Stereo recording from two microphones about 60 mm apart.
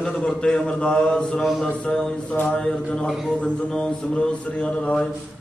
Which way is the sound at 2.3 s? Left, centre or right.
Left.